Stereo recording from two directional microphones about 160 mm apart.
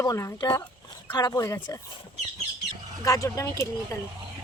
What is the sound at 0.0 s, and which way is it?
Speech, 20° left (ahead or behind).